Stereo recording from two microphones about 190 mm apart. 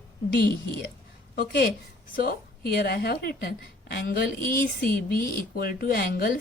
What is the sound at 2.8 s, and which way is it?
Speech, 55° left (ahead or behind).